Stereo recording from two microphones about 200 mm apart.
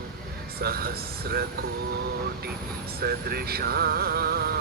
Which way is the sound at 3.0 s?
50° right (ahead or behind).